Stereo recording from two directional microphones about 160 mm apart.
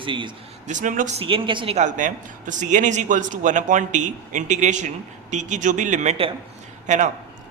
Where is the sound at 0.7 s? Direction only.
50° right (ahead or behind).